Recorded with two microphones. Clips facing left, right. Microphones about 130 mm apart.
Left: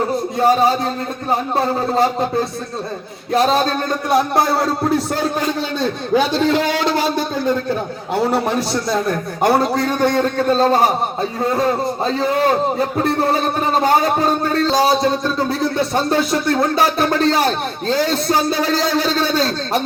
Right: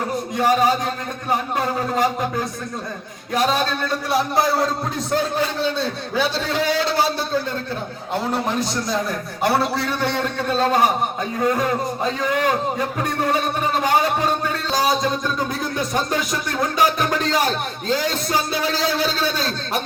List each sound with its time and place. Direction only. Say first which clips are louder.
0.3 s a man's voice: left 3 dB; 35° left (ahead or behind); by 4.5 s 55° left (ahead or behind)
8.9 s a man's voice: left 5 dB; 55° left (ahead or behind)